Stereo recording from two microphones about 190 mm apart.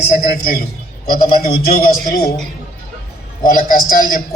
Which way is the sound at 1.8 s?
50° left (ahead or behind).